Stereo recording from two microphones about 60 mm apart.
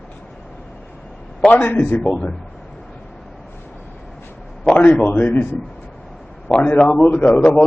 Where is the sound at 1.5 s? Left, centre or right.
Left.